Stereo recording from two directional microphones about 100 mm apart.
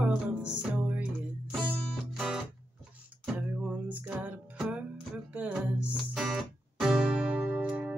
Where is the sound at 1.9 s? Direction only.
5° right (ahead or behind).